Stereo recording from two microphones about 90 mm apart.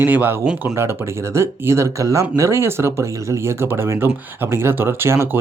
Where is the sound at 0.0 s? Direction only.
20° right (ahead or behind).